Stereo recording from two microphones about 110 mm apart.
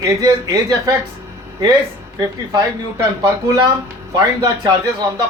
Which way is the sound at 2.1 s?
35° right (ahead or behind).